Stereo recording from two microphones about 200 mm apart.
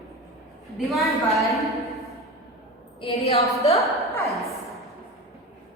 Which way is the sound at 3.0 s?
30° left (ahead or behind).